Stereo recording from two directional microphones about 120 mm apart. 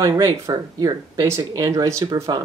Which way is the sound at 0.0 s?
30° right (ahead or behind).